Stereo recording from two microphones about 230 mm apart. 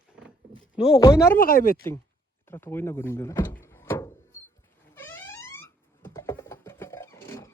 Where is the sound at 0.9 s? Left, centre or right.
Centre.